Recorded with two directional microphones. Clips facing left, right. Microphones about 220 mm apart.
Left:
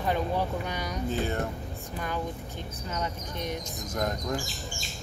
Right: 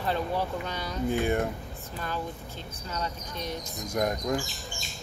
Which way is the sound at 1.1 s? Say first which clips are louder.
Right 4 dB; 15° right (ahead or behind).